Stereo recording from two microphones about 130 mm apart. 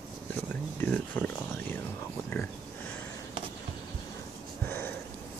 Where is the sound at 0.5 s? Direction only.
15° left (ahead or behind).